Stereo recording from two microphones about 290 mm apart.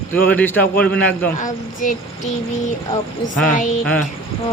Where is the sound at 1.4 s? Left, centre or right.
Left.